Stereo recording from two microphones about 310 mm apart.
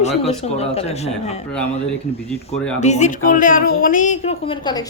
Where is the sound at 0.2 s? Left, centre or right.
Centre.